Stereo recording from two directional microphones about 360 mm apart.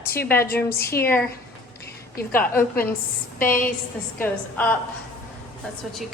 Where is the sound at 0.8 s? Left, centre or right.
Left.